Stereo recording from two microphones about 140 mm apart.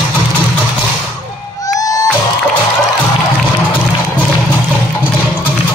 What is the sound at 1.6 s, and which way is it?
Music, 25° left (ahead or behind).